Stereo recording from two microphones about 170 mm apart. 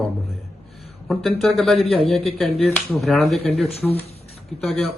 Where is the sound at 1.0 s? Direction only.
Centre (ahead or behind).